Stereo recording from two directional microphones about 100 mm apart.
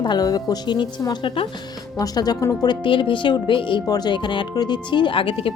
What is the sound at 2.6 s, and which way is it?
Speech, 55° left (ahead or behind).